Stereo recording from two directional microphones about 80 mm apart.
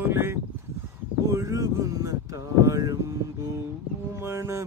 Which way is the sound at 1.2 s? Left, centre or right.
Right.